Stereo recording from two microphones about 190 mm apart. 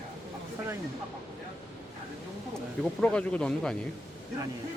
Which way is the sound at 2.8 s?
5° left (ahead or behind).